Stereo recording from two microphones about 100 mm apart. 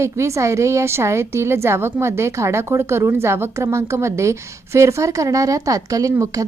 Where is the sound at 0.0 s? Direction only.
30° right (ahead or behind).